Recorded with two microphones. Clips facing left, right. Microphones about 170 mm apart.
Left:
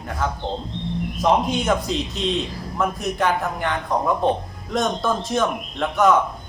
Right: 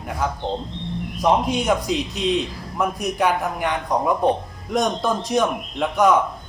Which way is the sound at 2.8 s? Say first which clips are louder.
Right 1 dB; 15° right (ahead or behind).